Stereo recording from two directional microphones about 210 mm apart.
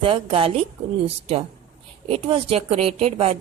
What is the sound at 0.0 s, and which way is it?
A woman's voice, 25° right (ahead or behind).